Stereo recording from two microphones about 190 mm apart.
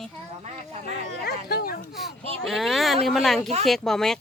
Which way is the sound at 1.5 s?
55° left (ahead or behind).